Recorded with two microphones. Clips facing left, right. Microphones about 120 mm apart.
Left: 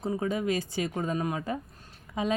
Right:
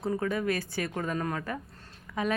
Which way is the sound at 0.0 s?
20° left (ahead or behind).